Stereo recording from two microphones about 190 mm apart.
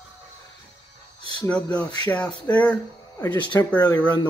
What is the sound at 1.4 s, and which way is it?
Speech, 5° left (ahead or behind).